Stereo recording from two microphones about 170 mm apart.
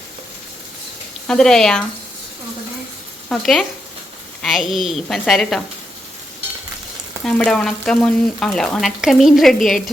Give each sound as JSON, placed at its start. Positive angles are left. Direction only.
{"t": 1.3, "sound": "frying", "side_deg": 5}
{"t": 3.2, "sound": "speech", "side_deg": 0}
{"t": 4.4, "sound": "frying", "side_deg": 0}
{"t": 7.3, "sound": "frying", "side_deg": 5}